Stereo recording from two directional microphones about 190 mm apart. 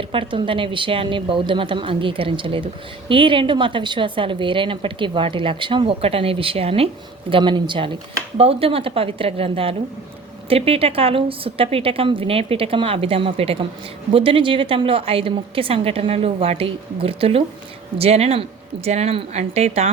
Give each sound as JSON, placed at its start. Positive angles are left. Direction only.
{"t": 0.1, "sound": "a woman's voice", "side_deg": -25}